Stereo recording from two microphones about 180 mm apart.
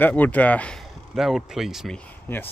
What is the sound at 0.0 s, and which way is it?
Speech, 10° left (ahead or behind).